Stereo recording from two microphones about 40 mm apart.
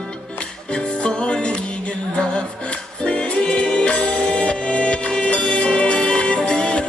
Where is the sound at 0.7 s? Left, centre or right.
Left.